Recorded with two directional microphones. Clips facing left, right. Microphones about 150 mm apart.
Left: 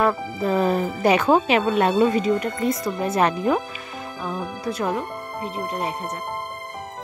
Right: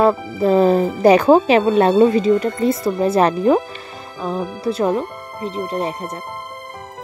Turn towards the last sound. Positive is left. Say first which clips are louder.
# right 4 dB
turn(degrees=-35)  # may be behind; listen again after turning